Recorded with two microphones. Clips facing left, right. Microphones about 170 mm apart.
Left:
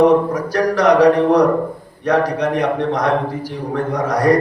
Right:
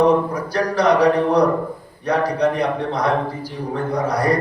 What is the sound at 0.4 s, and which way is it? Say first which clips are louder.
A man's voice: left 2 dB; 90° left.